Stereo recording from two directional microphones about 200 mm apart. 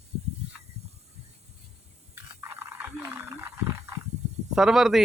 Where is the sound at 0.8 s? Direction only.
30° right (ahead or behind).